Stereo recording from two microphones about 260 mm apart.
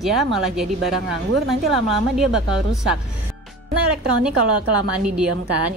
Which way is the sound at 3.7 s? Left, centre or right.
Right.